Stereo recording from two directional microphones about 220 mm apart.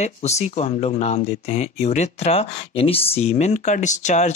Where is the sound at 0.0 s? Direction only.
30° left (ahead or behind).